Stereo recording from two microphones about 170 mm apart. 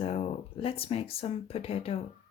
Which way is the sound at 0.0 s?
35° left (ahead or behind).